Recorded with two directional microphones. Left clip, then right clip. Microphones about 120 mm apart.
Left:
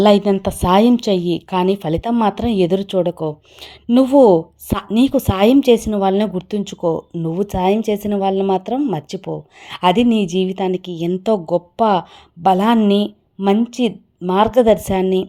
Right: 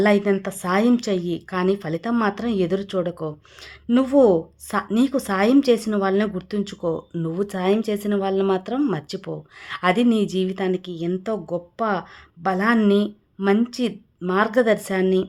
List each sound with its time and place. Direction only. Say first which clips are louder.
0.4 s a woman's voice: left 7 dB; 40° left (ahead or behind)